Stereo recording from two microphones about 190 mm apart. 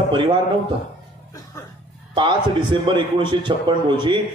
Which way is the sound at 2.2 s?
25° right (ahead or behind).